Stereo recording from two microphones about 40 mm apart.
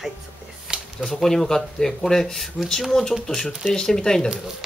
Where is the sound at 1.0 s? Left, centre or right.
Centre.